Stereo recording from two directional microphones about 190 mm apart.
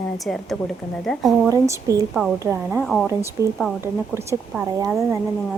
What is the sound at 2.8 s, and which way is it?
Speech, centre (ahead or behind).